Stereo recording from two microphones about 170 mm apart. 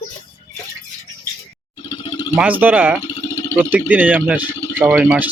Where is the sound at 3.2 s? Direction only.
20° left (ahead or behind).